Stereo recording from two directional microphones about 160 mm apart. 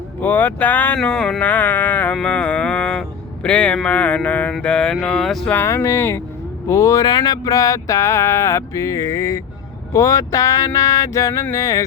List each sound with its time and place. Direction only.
0.2 s speech: 10° left (ahead or behind)